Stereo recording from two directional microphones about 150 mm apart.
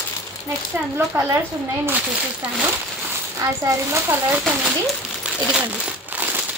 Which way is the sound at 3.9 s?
15° right (ahead or behind).